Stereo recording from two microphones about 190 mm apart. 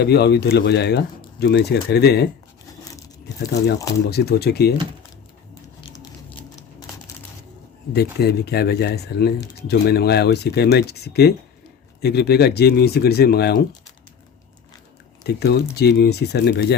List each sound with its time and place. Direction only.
0.0 s speech: 60° left (ahead or behind)
2.8 s tearing: 20° left (ahead or behind)
4.1 s speech: 55° left (ahead or behind)
7.9 s speech: 55° left (ahead or behind)
15.2 s speech: 60° left (ahead or behind)